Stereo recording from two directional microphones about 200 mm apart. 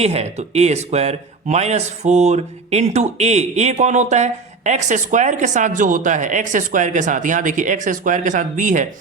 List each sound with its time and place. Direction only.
0.0 s a man's voice: 30° right (ahead or behind)